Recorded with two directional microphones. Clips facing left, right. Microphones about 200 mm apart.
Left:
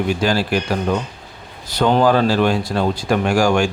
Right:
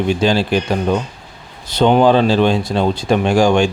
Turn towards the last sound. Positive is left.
turn(degrees=-20)  # may be behind; listen again after turning